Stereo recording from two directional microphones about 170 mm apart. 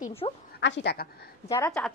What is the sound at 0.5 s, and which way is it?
Speech, 90° left.